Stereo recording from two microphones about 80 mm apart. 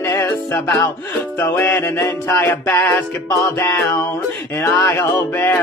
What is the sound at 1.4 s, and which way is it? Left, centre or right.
Music, left.